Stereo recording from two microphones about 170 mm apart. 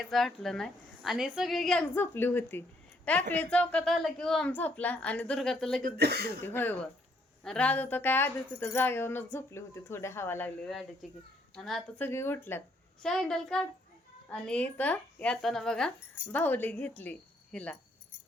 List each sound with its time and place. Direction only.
0.1 s a woman's voice: centre (ahead or behind)
5.8 s speech: 70° right (ahead or behind)
6.4 s a woman's voice: 10° left (ahead or behind)
12.0 s speech: 15° left (ahead or behind)
13.0 s a woman's voice: centre (ahead or behind)